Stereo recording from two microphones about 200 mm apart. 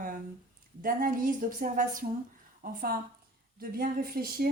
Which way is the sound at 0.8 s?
45° right (ahead or behind).